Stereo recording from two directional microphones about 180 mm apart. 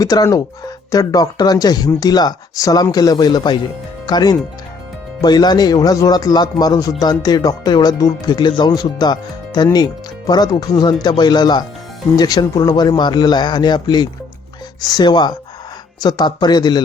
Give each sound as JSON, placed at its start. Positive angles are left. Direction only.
{"t": 0.0, "sound": "speech", "side_deg": 20}